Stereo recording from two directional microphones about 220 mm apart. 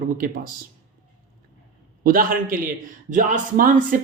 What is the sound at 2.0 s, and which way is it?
Speech, 40° right (ahead or behind).